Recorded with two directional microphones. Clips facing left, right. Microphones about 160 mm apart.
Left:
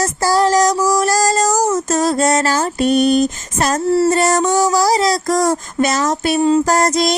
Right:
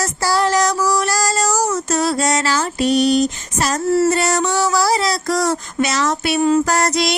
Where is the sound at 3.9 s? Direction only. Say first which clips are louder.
Left 1 dB; 30° left (ahead or behind).